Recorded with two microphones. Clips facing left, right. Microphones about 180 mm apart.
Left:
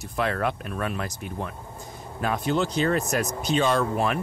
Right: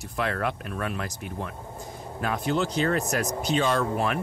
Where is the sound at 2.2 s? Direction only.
25° left (ahead or behind).